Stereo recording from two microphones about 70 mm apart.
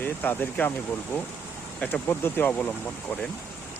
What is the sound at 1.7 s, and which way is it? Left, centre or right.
Speech, left.